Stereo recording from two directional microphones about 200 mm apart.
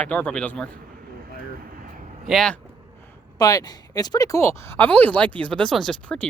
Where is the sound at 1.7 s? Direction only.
45° right (ahead or behind).